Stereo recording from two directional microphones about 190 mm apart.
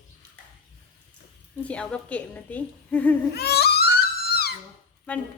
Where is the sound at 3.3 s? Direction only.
60° left (ahead or behind).